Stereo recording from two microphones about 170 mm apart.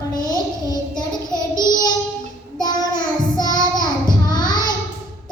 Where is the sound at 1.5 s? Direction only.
25° left (ahead or behind).